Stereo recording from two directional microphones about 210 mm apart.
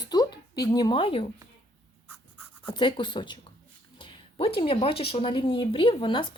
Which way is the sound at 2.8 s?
25° left (ahead or behind).